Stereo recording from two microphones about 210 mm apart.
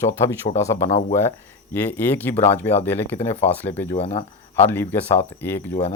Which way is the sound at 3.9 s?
30° left (ahead or behind).